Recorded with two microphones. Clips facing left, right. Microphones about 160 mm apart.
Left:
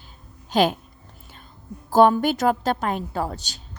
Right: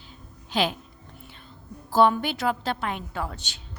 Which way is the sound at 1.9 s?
45° left (ahead or behind).